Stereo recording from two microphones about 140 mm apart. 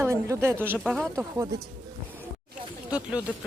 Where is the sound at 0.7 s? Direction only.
Centre (ahead or behind).